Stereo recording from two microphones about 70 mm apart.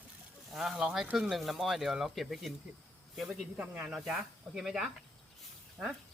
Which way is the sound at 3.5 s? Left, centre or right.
Right.